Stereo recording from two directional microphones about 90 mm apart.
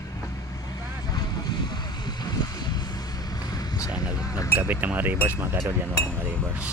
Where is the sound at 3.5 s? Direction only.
45° left (ahead or behind).